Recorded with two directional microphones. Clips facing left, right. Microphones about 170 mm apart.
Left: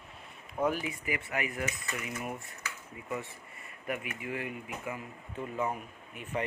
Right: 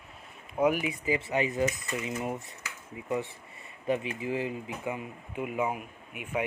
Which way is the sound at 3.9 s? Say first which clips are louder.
Right 7 dB; 25° right (ahead or behind).